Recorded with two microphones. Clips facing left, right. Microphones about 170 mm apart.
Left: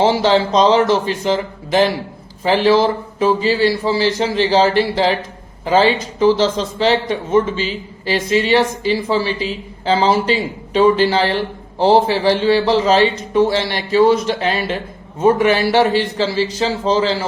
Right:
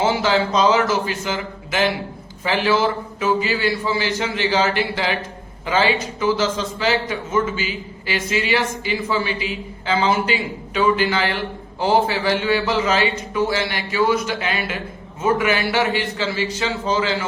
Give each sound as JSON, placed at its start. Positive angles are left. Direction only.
{"t": 0.0, "sound": "speech", "side_deg": 30}